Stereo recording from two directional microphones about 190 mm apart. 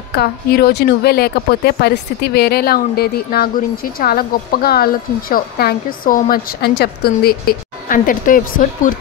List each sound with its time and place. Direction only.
0.1 s speech: 55° left (ahead or behind)